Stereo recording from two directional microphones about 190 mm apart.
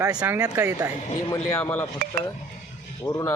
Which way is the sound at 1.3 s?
15° left (ahead or behind).